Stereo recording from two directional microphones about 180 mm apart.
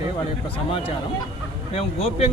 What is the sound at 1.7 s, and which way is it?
Speech, 35° left (ahead or behind).